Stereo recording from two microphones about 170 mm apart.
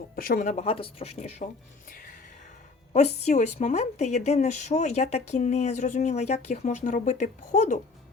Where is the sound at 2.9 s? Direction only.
40° left (ahead or behind).